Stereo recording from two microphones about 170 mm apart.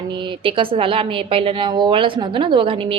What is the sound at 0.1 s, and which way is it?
A woman's voice, 30° right (ahead or behind).